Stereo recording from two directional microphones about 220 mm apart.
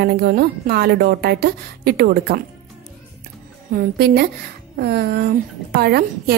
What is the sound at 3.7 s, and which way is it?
A woman's voice, 45° right (ahead or behind).